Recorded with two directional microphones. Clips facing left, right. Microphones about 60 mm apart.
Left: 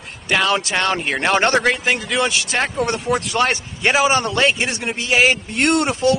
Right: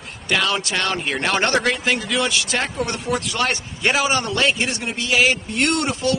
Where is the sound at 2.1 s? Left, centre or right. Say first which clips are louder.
Left 2 dB; left.